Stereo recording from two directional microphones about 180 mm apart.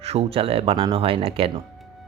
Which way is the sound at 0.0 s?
35° right (ahead or behind).